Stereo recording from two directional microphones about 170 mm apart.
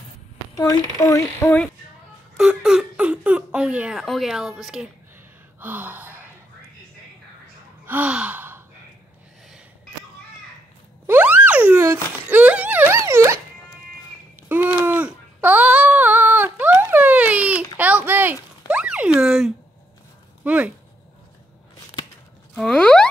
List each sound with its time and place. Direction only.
0.6 s speech: 20° left (ahead or behind)
2.3 s speech: 5° right (ahead or behind)
5.6 s gasp: 10° right (ahead or behind)
7.8 s gasp: 10° right (ahead or behind)
11.1 s a sound: 10° right (ahead or behind)
14.5 s a sound: 10° right (ahead or behind)
20.4 s speech: 5° right (ahead or behind)
22.6 s speech: 5° left (ahead or behind)